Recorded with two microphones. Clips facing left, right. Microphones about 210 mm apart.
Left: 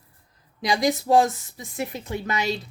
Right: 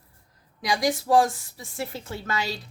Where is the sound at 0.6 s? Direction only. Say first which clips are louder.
Left 2 dB; 25° left (ahead or behind).